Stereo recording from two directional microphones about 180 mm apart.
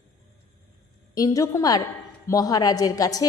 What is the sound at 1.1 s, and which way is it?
A woman's voice, 20° left (ahead or behind).